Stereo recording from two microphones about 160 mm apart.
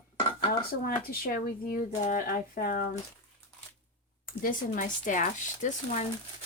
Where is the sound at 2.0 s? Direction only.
60° left (ahead or behind).